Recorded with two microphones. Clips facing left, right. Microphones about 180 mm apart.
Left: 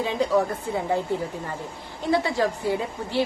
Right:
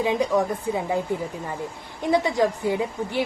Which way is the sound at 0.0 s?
15° right (ahead or behind).